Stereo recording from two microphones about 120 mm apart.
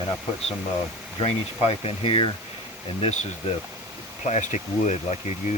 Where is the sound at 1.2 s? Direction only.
55° left (ahead or behind).